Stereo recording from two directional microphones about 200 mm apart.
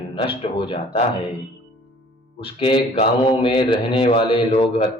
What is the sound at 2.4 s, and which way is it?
A man's voice, 25° left (ahead or behind).